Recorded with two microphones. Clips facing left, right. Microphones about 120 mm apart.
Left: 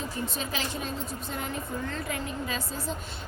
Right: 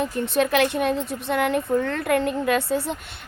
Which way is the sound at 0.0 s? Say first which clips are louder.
Right 11 dB; 65° right (ahead or behind).